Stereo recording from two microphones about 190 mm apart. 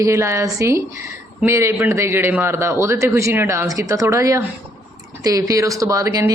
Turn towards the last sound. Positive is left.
turn(degrees=-15)  # may be behind; listen again after turning